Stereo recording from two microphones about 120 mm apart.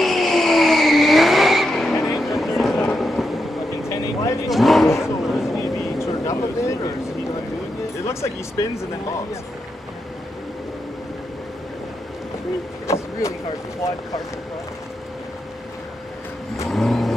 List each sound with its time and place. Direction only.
0.0 s vehicle: centre (ahead or behind)
3.9 s vehicle: 25° left (ahead or behind)
4.5 s a sound: centre (ahead or behind)
5.0 s vehicle: 5° right (ahead or behind)
5.6 s vehicle: 25° left (ahead or behind)
12.8 s vehicle: 25° left (ahead or behind)
16.7 s vehicle: centre (ahead or behind)